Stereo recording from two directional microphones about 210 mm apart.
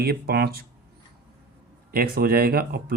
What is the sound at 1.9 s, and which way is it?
Speech, 45° right (ahead or behind).